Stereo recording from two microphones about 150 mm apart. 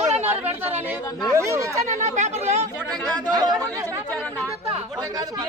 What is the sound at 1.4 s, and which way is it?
Speech, 20° right (ahead or behind).